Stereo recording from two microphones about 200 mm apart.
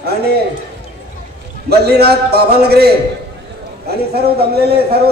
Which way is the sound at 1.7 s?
55° right (ahead or behind).